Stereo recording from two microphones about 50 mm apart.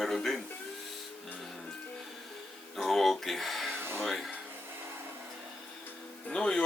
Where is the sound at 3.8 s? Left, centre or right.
Right.